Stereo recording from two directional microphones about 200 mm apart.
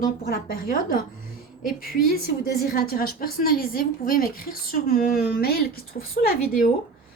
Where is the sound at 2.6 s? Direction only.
50° left (ahead or behind).